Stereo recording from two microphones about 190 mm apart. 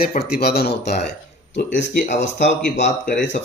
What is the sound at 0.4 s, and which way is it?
Speech, 55° left (ahead or behind).